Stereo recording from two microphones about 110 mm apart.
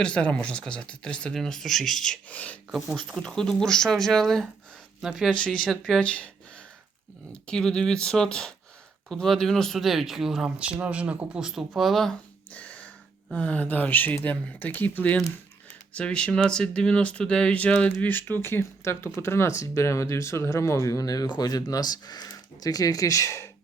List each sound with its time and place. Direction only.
0.0 s speech: 10° left (ahead or behind)
2.7 s speech: centre (ahead or behind)
5.3 s speech: 10° left (ahead or behind)
7.4 s speech: 5° left (ahead or behind)
12.5 s speech: 15° left (ahead or behind)